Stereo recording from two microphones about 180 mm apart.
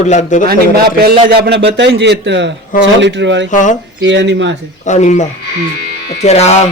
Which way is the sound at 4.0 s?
90° right.